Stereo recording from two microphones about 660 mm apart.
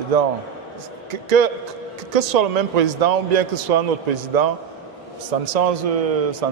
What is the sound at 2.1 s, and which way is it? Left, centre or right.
A man's voice, right.